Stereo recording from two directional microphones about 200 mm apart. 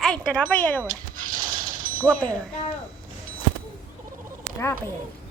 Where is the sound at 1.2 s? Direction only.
45° right (ahead or behind).